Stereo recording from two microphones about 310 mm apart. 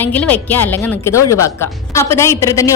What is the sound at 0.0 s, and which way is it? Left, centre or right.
A woman's voice, centre.